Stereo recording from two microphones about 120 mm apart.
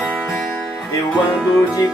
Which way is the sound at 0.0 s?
10° left (ahead or behind).